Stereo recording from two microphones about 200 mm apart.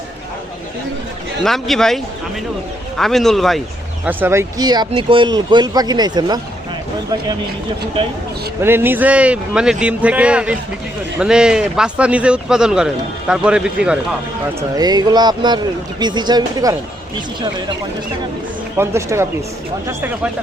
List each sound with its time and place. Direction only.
1.5 s a man's voice: centre (ahead or behind)
3.0 s a man's voice: centre (ahead or behind)
4.0 s speech: 10° right (ahead or behind)
8.6 s a man's voice: 10° right (ahead or behind)
14.8 s speech: 20° right (ahead or behind)
18.8 s speech: 15° right (ahead or behind)